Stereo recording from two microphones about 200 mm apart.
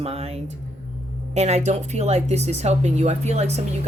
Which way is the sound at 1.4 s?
35° right (ahead or behind).